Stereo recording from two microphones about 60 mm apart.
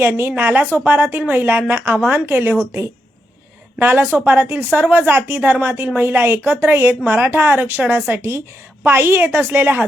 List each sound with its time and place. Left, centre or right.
0.0 s a woman's voice: right
0.5 s a woman's voice: right
0.9 s a woman's voice: right
1.9 s speech: right
2.1 s a woman's voice: right
3.8 s a woman's voice: right